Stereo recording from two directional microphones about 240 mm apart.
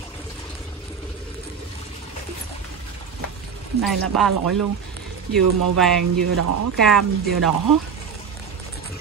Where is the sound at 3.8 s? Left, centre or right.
Centre.